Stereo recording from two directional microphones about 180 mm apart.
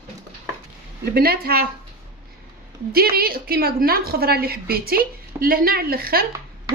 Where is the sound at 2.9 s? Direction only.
60° right (ahead or behind).